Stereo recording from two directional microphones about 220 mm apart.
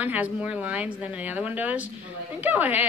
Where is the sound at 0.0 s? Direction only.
5° right (ahead or behind).